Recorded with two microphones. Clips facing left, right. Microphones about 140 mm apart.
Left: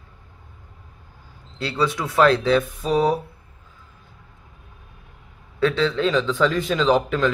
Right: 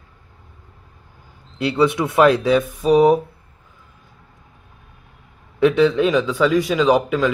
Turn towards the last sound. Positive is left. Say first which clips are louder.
# right 3 dB
turn(degrees=-10)  # may be behind; listen again after turning